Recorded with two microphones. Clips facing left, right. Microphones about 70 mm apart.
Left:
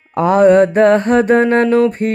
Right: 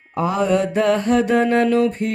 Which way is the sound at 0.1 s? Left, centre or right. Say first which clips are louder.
Left 9 dB; left.